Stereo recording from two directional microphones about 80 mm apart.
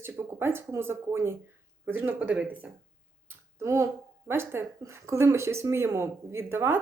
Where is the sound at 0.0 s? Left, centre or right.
Right.